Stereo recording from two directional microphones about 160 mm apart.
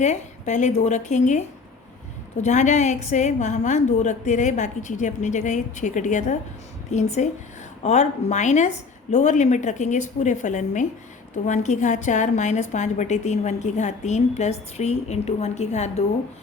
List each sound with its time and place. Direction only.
0.0 s a woman's voice: 45° left (ahead or behind)